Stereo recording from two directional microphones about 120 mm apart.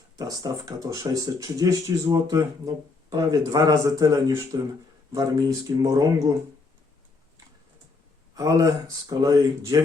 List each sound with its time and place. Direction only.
0.2 s speech: 30° right (ahead or behind)
8.4 s speech: 30° right (ahead or behind)